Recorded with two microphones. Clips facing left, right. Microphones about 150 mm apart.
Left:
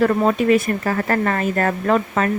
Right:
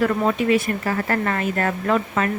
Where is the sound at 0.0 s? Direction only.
40° left (ahead or behind).